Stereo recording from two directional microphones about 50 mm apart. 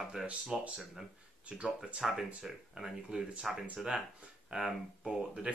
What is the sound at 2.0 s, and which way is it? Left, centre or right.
Speech, centre.